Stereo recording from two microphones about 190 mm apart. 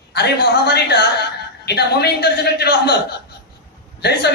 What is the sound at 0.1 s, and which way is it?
A man's voice, 60° left (ahead or behind).